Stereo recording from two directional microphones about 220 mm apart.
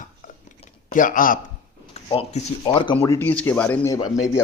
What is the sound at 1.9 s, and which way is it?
Speech, 30° left (ahead or behind).